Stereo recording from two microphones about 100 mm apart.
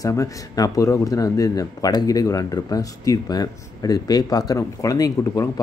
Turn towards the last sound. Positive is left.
turn(degrees=35)  # may be behind; listen again after turning